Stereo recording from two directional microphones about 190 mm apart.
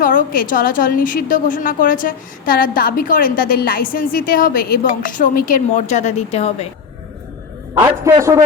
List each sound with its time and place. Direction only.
0.0 s a woman's voice: 45° left (ahead or behind)
7.9 s a man's voice: 15° right (ahead or behind)